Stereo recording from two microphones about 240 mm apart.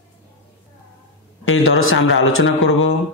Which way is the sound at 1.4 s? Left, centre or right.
Left.